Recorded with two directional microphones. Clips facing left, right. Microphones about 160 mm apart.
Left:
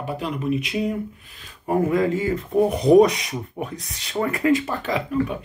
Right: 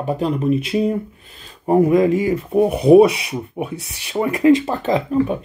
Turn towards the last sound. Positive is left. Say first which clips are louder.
# right 6 dB
turn(degrees=-35)  # may be behind; listen again after turning